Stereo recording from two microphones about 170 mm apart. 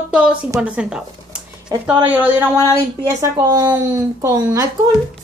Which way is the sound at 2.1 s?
10° right (ahead or behind).